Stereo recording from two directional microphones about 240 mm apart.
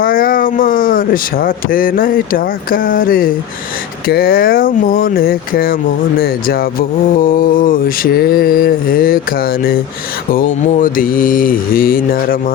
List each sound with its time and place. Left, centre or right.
0.0 s mantra: left